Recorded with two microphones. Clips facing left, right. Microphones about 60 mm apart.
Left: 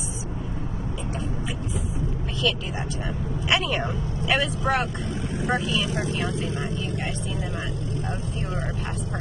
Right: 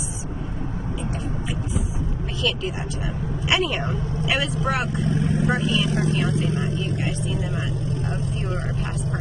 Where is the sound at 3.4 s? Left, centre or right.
Centre.